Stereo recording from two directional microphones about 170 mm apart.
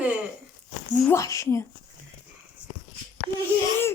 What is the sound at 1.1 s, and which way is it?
Baby cry, 20° left (ahead or behind).